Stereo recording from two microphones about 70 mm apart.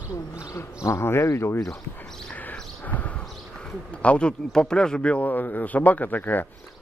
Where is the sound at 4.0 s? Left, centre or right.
Centre.